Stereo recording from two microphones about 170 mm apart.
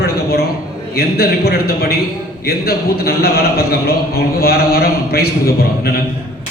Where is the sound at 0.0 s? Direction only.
65° left (ahead or behind).